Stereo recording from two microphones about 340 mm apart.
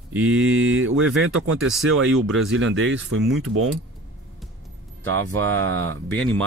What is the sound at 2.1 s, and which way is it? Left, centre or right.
Speech, centre.